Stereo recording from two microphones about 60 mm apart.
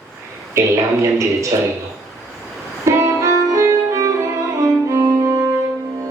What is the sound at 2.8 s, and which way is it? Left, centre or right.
Music, right.